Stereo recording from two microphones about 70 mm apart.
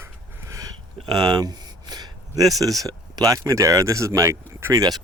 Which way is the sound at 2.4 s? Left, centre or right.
Right.